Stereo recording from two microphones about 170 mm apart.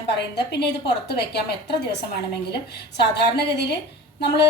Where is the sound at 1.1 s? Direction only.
75° left (ahead or behind).